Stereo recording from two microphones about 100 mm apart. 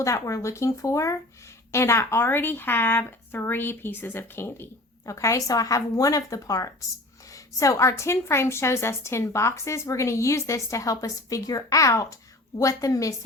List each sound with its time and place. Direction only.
0.0 s speech: 30° left (ahead or behind)